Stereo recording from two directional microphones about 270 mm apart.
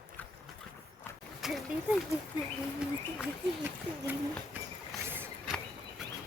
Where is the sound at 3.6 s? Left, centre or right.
Centre.